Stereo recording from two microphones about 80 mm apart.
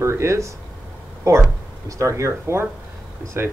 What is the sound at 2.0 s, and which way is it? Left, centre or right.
Speech, right.